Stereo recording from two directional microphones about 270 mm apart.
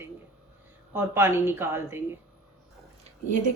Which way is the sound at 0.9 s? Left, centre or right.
Centre.